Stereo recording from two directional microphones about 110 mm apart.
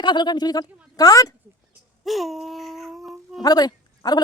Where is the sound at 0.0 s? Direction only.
40° left (ahead or behind).